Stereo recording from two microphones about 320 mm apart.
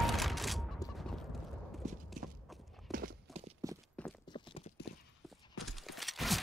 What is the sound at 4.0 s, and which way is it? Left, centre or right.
Clip-clop, centre.